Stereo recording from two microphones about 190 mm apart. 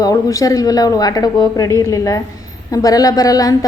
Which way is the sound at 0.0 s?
20° left (ahead or behind).